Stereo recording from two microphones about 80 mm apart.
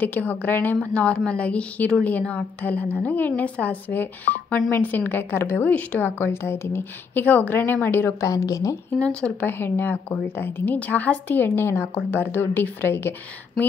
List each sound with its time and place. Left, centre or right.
0.0 s a woman's voice: centre
8.2 s speech: left
8.9 s speech: centre
9.5 s a woman's voice: left